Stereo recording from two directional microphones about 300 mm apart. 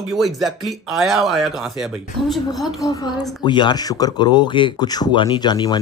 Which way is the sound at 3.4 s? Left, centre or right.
Centre.